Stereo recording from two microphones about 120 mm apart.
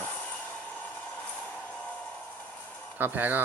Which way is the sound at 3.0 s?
15° right (ahead or behind).